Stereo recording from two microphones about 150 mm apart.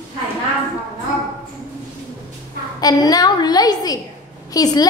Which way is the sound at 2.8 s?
25° left (ahead or behind).